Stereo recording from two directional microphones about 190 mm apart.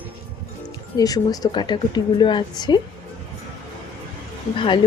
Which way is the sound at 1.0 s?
20° left (ahead or behind).